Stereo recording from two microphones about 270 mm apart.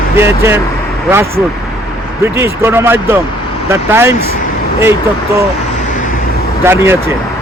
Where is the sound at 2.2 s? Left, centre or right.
Centre.